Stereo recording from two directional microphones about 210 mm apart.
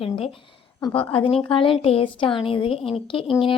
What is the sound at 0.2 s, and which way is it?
Speech, 25° left (ahead or behind).